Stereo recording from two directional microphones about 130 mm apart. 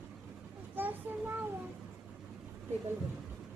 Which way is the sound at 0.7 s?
15° right (ahead or behind).